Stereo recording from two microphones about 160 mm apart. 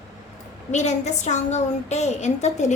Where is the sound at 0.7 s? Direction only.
45° left (ahead or behind).